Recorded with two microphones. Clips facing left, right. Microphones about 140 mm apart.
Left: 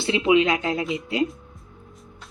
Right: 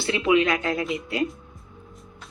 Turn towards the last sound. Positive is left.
turn(degrees=20)  # may be behind; listen again after turning